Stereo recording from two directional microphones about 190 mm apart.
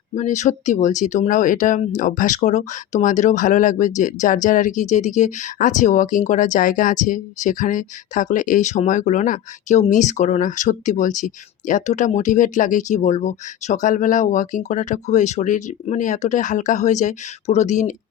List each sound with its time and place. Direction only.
0.1 s speech: 40° left (ahead or behind)